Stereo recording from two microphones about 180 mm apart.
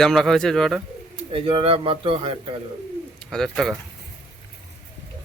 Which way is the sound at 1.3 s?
30° right (ahead or behind).